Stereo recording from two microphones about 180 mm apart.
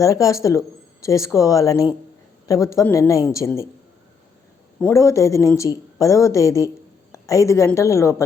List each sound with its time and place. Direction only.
0.0 s speech: 20° left (ahead or behind)
4.8 s a woman's voice: 15° left (ahead or behind)